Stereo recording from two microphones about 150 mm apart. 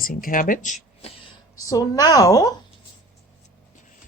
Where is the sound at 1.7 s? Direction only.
25° left (ahead or behind).